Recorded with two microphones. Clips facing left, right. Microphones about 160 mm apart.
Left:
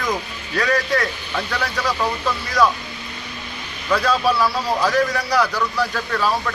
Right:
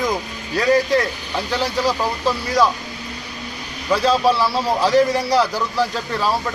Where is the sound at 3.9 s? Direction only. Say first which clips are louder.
Right 2 dB; 25° right (ahead or behind).